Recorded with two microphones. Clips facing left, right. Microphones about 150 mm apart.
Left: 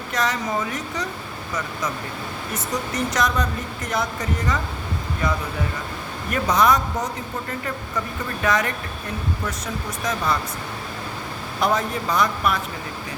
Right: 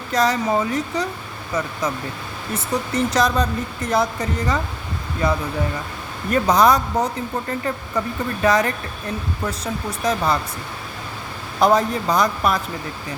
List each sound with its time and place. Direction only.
0.1 s speech: 35° right (ahead or behind)
2.9 s speech: 30° right (ahead or behind)
10.0 s speech: 35° right (ahead or behind)
11.6 s speech: 35° right (ahead or behind)